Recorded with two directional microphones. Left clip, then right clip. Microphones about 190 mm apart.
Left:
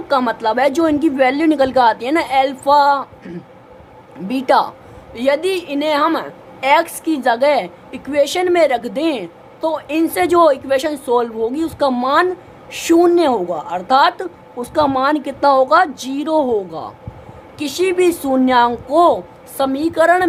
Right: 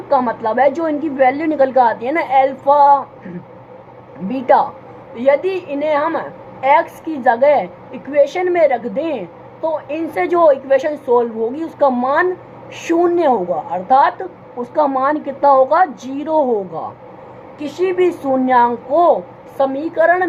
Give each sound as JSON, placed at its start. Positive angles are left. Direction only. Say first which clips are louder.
{"t": 0.1, "sound": "a woman's voice", "louder": "even", "side_deg": 30}
{"t": 4.3, "sound": "a woman's voice", "louder": "right 1 dB", "side_deg": 25}